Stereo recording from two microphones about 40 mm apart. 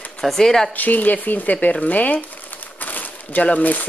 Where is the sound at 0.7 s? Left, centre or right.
Left.